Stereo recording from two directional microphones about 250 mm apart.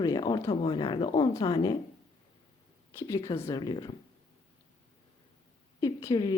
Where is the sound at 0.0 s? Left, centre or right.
Centre.